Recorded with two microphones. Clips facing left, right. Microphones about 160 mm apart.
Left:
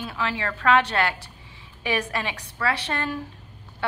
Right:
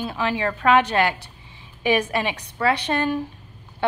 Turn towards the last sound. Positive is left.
turn(degrees=-15)  # may be behind; listen again after turning